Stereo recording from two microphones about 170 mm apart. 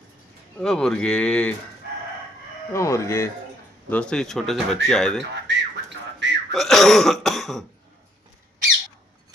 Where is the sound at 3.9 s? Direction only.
5° left (ahead or behind).